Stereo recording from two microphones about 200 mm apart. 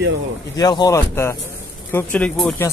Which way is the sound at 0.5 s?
20° left (ahead or behind).